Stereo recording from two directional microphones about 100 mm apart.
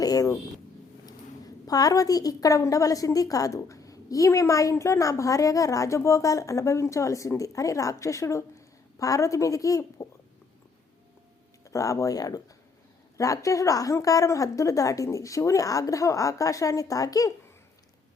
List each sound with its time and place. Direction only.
0.0 s a sound: 40° left (ahead or behind)
1.6 s a woman's voice: 40° left (ahead or behind)
11.6 s a woman's voice: 35° left (ahead or behind)